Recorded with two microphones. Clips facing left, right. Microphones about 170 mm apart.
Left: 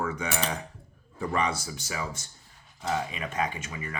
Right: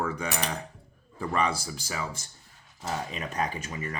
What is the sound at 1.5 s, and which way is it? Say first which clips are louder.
Speech: right 1 dB; 30° right (ahead or behind).